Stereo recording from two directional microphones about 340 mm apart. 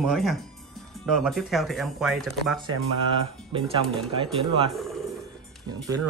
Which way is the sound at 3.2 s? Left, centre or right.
Centre.